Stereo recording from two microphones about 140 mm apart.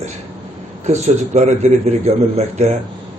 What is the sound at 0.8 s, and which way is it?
A man's voice, 55° right (ahead or behind).